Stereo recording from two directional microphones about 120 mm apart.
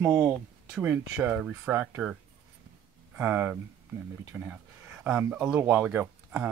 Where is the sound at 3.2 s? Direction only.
15° right (ahead or behind).